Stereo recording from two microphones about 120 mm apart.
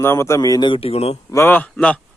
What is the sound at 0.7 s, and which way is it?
Speech, 55° left (ahead or behind).